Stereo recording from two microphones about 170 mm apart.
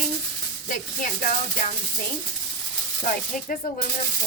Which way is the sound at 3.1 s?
55° left (ahead or behind).